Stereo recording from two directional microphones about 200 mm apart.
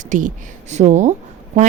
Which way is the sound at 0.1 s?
40° right (ahead or behind).